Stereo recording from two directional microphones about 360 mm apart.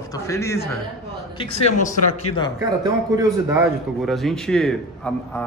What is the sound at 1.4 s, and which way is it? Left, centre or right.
Speech, centre.